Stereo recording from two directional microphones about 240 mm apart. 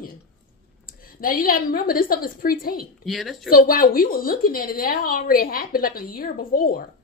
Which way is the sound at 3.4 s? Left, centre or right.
Left.